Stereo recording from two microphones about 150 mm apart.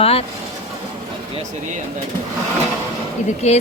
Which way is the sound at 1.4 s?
55° right (ahead or behind).